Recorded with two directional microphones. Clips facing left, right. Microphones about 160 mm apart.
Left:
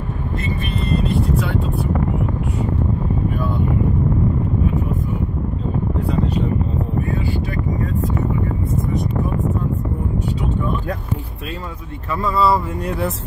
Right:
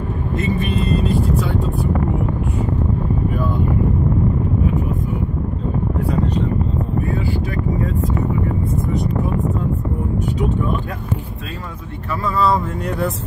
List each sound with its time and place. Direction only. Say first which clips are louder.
12.3 s speech: even; 10° left (ahead or behind)